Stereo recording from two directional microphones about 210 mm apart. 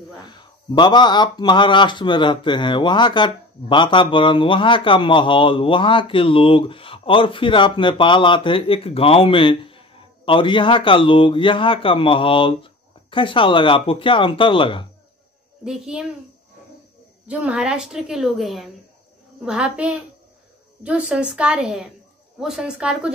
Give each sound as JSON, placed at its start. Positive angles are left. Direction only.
{"t": 0.3, "sound": "speech", "side_deg": 20}
{"t": 15.6, "sound": "a woman's voice", "side_deg": -5}
{"t": 17.3, "sound": "a woman's voice", "side_deg": -5}